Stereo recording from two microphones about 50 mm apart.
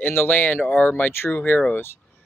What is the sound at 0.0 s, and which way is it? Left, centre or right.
Speech, left.